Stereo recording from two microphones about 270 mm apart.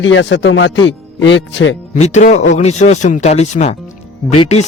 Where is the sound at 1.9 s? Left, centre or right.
Left.